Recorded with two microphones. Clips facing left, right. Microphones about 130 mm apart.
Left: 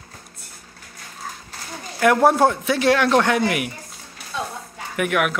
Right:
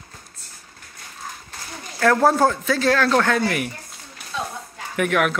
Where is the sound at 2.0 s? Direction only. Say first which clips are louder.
Left 1 dB; 15° left (ahead or behind).